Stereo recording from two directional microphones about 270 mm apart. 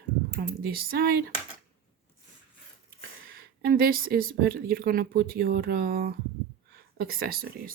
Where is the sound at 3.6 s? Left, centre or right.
Right.